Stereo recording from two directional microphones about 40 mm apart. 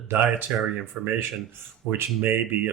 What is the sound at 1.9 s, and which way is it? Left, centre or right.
Speech, right.